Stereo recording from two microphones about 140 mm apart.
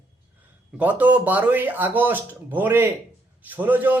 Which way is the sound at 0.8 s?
10° right (ahead or behind).